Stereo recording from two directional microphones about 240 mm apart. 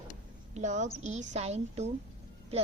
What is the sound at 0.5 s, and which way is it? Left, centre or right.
A woman's voice, right.